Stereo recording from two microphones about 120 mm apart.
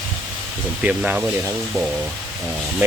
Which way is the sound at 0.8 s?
10° right (ahead or behind).